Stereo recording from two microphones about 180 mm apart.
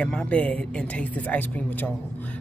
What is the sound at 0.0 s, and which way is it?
Speech, 5° left (ahead or behind).